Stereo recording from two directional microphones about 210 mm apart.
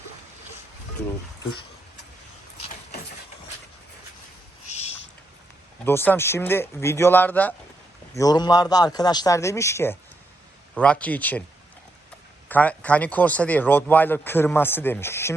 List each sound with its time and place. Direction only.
4.7 s owl: 30° left (ahead or behind)
5.8 s speech: 10° left (ahead or behind)
12.5 s speech: 5° left (ahead or behind)